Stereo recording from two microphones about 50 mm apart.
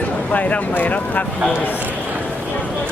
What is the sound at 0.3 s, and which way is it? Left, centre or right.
Speech, left.